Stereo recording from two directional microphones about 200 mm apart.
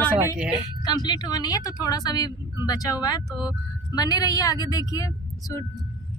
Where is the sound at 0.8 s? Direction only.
20° left (ahead or behind).